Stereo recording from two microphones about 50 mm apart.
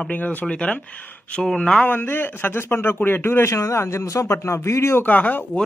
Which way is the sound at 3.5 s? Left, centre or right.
Left.